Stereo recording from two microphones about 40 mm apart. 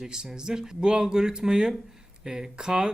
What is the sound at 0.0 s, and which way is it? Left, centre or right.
Speech, centre.